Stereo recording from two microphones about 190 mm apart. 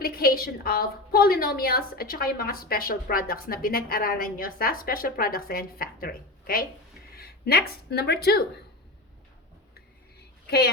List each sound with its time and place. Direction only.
0.0 s a woman's voice: 55° left (ahead or behind)
7.2 s a sound: 55° left (ahead or behind)
7.6 s a woman's voice: 60° left (ahead or behind)